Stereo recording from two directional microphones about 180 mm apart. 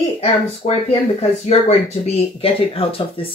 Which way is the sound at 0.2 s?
35° left (ahead or behind).